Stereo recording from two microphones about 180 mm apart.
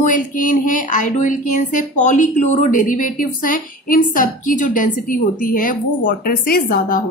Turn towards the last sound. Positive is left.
turn(degrees=50)  # may be behind; listen again after turning